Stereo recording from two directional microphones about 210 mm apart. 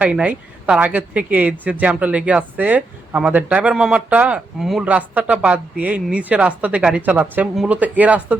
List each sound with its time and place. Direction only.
0.0 s speech: 5° right (ahead or behind)